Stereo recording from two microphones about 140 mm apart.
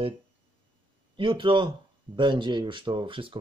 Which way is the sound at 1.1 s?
35° right (ahead or behind).